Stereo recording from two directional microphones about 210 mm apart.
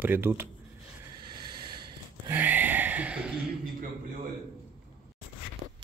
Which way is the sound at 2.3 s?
10° right (ahead or behind).